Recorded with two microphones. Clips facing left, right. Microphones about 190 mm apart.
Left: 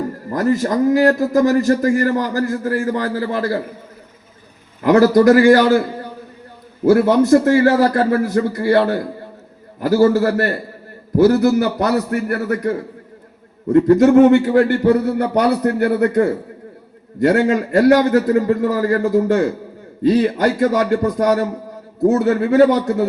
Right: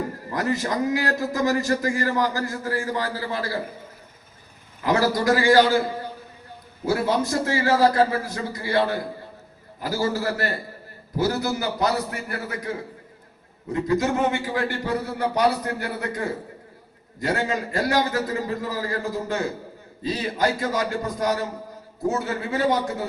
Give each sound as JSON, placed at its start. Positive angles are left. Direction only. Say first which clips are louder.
{"t": 0.3, "sound": "a man's voice", "louder": "left 8 dB", "side_deg": 50}
{"t": 4.9, "sound": "a man's voice", "louder": "left 10 dB", "side_deg": 65}
{"t": 6.8, "sound": "a man's voice", "louder": "left 10 dB", "side_deg": 60}